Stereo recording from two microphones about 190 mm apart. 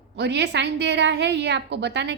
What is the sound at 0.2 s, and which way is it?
A woman's voice, 65° right (ahead or behind).